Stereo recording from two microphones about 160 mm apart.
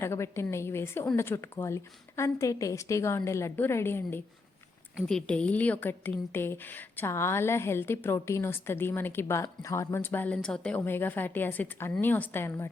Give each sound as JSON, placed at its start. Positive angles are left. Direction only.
{"t": 0.0, "sound": "a woman's voice", "side_deg": 15}
{"t": 4.9, "sound": "a woman's voice", "side_deg": 5}